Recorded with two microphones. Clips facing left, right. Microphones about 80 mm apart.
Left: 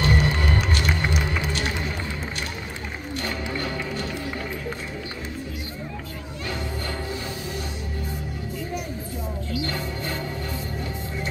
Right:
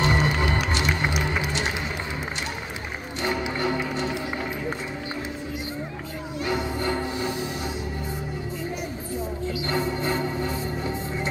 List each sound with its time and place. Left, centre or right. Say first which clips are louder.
0.0 s music: right 1 dB; centre
3.2 s music: right 4 dB; centre
6.4 s music: right 5 dB; right
9.5 s music: right 3 dB; right